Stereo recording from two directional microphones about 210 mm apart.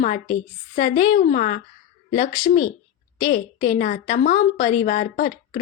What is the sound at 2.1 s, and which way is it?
A woman's voice, 20° left (ahead or behind).